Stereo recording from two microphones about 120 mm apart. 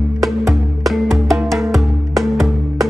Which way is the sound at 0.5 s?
Centre (ahead or behind).